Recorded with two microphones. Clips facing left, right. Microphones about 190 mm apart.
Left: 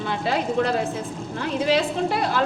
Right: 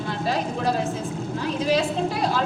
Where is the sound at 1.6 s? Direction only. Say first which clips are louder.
Left 1 dB; 70° left (ahead or behind).